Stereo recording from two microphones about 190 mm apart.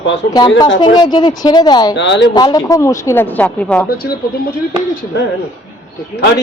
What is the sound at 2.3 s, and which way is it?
Speech, 20° left (ahead or behind).